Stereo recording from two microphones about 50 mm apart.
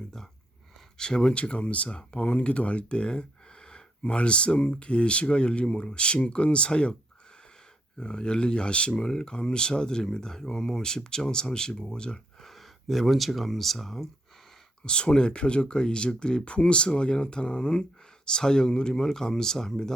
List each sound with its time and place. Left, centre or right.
0.9 s speech: centre
7.9 s speech: centre
12.5 s speech: centre
14.8 s speech: centre